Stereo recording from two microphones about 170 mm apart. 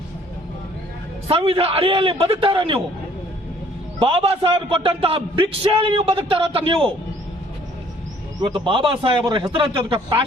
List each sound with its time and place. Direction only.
1.3 s a man's voice: 35° right (ahead or behind)
4.0 s a man's voice: 35° right (ahead or behind)
8.4 s a man's voice: 30° right (ahead or behind)